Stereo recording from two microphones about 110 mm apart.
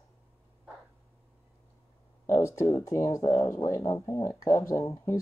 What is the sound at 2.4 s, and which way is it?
Speech, 25° left (ahead or behind).